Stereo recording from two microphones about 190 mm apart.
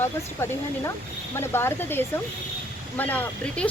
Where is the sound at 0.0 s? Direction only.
10° left (ahead or behind).